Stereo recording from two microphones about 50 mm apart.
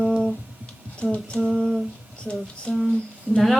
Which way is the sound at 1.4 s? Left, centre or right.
Centre.